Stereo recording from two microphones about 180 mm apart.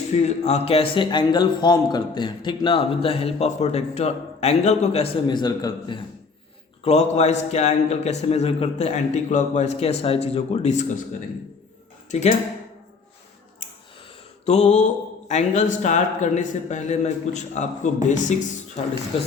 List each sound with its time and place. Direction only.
0.3 s speech: 35° left (ahead or behind)
6.8 s speech: 40° left (ahead or behind)
12.1 s speech: 40° left (ahead or behind)
14.4 s speech: 40° left (ahead or behind)